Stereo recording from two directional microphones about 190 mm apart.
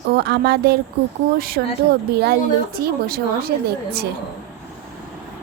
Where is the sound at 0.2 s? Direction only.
60° right (ahead or behind).